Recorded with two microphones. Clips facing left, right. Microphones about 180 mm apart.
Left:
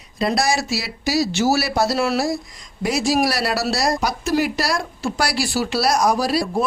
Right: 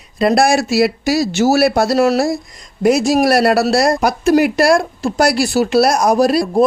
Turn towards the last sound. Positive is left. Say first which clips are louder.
# right 8 dB
turn(degrees=-50)  # may be behind; listen again after turning